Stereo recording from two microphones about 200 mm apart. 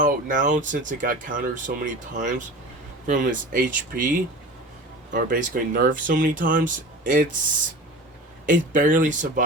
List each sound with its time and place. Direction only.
0.0 s speech: 40° right (ahead or behind)
8.4 s speech: 40° right (ahead or behind)